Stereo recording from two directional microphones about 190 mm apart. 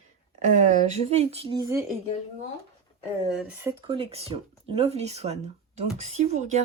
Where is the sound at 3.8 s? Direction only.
30° right (ahead or behind).